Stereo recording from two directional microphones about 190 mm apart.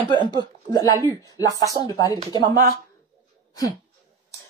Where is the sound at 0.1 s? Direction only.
25° right (ahead or behind).